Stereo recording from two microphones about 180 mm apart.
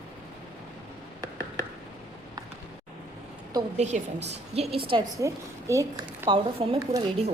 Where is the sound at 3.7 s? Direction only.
40° right (ahead or behind).